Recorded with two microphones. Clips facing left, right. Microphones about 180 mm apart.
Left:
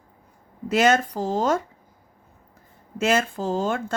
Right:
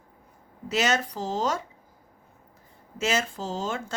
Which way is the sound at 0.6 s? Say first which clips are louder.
Left 6 dB; 50° left (ahead or behind).